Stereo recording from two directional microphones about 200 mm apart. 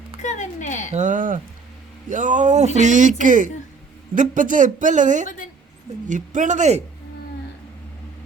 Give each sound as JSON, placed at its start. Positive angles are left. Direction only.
{"t": 0.2, "sound": "speech", "side_deg": 35}
{"t": 0.9, "sound": "speech", "side_deg": -40}